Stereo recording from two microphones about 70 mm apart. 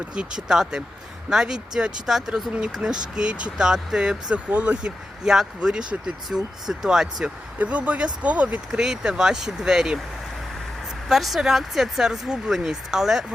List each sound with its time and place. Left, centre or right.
0.1 s speech: centre
7.6 s speech: centre
8.8 s speech: centre
11.1 s speech: centre